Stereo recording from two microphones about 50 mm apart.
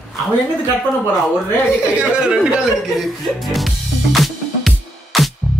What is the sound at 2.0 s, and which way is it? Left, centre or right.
Speech, centre.